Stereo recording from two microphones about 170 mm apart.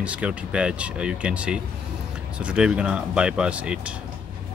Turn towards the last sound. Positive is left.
turn(degrees=-5)  # may be behind; listen again after turning